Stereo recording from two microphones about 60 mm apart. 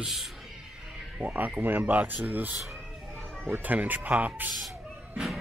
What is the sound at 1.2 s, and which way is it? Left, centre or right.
Speech, right.